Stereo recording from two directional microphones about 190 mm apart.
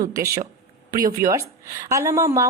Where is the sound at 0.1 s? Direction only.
20° right (ahead or behind).